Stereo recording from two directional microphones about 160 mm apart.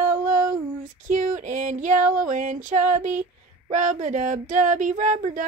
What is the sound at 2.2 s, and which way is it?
A woman's voice, 50° right (ahead or behind).